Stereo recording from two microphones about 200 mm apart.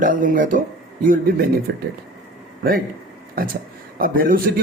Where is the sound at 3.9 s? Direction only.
45° right (ahead or behind).